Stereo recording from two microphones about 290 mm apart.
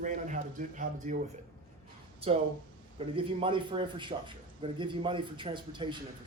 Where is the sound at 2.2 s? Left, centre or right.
Centre.